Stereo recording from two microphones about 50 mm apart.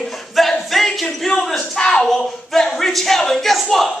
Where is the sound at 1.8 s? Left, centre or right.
Left.